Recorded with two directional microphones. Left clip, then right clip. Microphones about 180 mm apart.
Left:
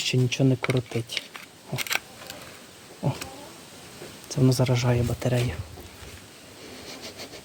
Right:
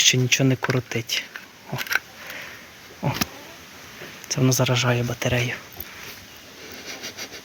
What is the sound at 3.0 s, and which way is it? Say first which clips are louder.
Cat: right 6 dB; 30° right (ahead or behind).